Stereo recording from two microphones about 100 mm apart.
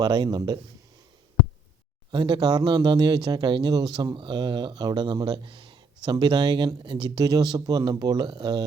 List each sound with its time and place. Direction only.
0.0 s speech: 45° right (ahead or behind)
2.1 s speech: 50° right (ahead or behind)